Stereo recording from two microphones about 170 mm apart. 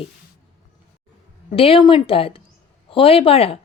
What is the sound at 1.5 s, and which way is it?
A woman's voice, 35° left (ahead or behind).